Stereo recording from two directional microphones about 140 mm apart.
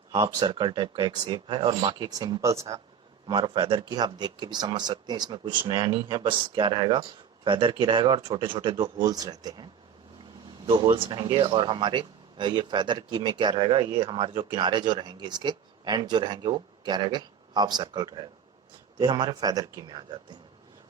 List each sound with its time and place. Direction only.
0.1 s speech: 30° right (ahead or behind)
10.7 s a man's voice: 35° right (ahead or behind)